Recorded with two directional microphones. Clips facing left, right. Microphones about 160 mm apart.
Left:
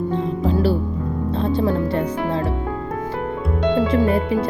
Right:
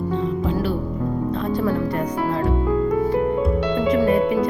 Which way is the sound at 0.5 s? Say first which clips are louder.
Left 3 dB; 35° left (ahead or behind).